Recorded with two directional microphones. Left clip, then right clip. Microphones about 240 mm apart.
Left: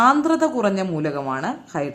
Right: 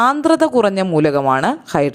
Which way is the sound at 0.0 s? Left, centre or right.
Right.